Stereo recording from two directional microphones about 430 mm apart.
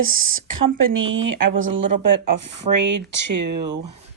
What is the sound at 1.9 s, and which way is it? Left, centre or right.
Speech, right.